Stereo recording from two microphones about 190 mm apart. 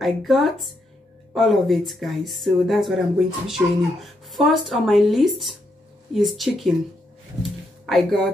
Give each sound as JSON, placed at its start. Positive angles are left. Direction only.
{"t": 0.0, "sound": "speech", "side_deg": 0}
{"t": 7.8, "sound": "speech", "side_deg": 0}